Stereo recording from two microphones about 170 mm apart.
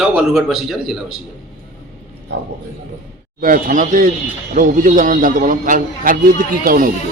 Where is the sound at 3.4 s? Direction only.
55° right (ahead or behind).